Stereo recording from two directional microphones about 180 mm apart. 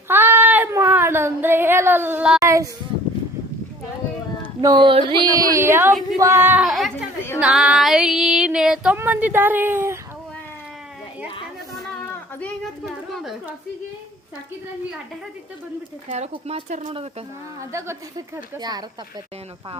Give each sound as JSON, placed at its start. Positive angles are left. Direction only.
{"t": 0.1, "sound": "child singing", "side_deg": -10}
{"t": 4.6, "sound": "speech", "side_deg": -25}
{"t": 6.1, "sound": "female singing", "side_deg": -15}
{"t": 6.7, "sound": "speech", "side_deg": 0}
{"t": 7.3, "sound": "female singing", "side_deg": -5}
{"t": 12.4, "sound": "a woman's voice", "side_deg": 10}
{"t": 16.0, "sound": "speech", "side_deg": -40}
{"t": 17.7, "sound": "female singing", "side_deg": -15}
{"t": 18.5, "sound": "speech", "side_deg": -20}